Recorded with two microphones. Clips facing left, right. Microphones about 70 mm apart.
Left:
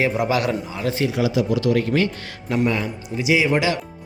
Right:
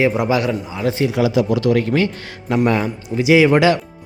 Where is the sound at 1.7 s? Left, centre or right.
Right.